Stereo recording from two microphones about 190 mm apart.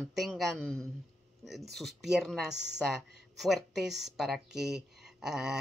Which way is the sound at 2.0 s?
Centre (ahead or behind).